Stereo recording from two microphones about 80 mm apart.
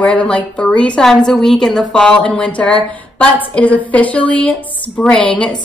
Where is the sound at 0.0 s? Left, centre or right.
Centre.